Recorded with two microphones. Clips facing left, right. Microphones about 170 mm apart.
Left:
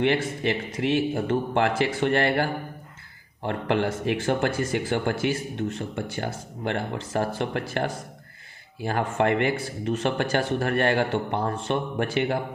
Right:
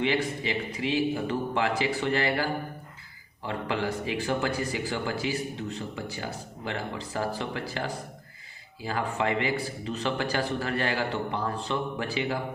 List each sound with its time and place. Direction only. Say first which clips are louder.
0.0 s speech: left 4 dB; 60° left (ahead or behind)